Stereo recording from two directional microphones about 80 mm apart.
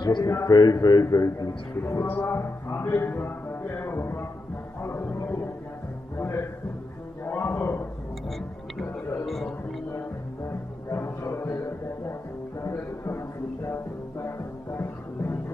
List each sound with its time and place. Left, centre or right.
0.2 s a man's voice: left
0.5 s a man's voice: left
1.8 s speech: left
4.8 s music: left
7.2 s a sound: left
9.2 s music: centre
10.9 s music: left
14.2 s music: left